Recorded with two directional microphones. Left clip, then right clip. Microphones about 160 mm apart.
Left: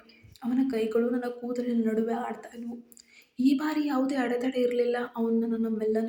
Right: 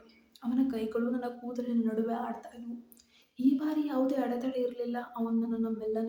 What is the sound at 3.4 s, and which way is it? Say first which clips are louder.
A woman's voice: left 3 dB; 20° left (ahead or behind).